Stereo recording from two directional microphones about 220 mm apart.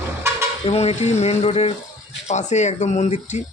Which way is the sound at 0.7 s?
30° left (ahead or behind).